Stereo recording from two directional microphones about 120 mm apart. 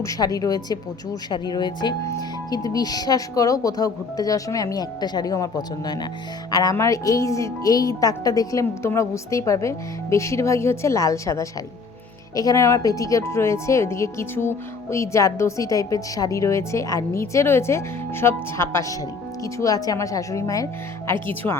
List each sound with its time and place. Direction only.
0.0 s speech: 30° left (ahead or behind)